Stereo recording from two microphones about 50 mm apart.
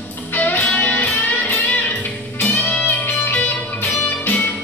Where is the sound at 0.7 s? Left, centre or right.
Left.